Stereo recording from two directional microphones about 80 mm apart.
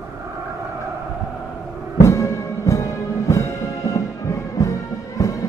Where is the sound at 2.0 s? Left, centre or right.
Left.